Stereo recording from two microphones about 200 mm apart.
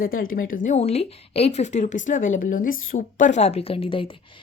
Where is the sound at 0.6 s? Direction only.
35° left (ahead or behind).